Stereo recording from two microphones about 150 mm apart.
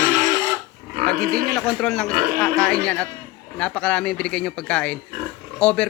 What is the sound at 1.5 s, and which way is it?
Speech, 5° left (ahead or behind).